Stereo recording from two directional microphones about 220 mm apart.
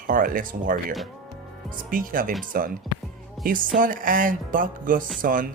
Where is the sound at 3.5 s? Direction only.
40° right (ahead or behind).